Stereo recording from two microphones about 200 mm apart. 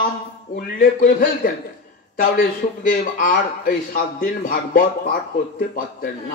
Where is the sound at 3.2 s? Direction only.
40° left (ahead or behind).